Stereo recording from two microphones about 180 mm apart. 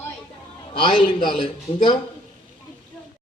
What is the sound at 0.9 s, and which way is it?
Speech, 50° left (ahead or behind).